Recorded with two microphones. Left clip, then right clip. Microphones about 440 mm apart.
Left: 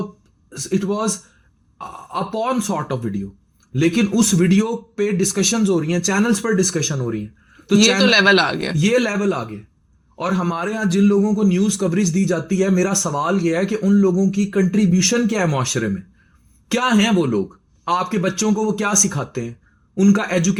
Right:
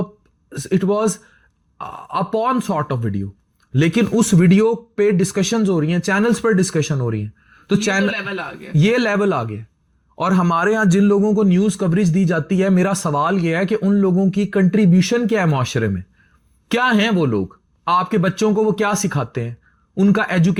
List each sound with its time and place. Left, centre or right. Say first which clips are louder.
0.5 s a man's voice: right 4 dB; right
8.1 s a man's voice: left 12 dB; left
8.8 s a man's voice: right 3 dB; right